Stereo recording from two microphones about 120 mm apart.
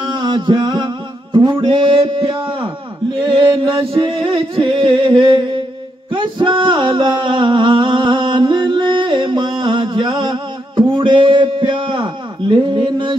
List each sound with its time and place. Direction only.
0.1 s music: 40° right (ahead or behind)